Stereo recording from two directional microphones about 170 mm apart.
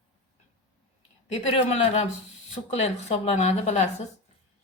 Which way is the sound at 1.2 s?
45° left (ahead or behind).